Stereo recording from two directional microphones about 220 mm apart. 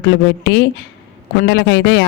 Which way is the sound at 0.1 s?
50° left (ahead or behind).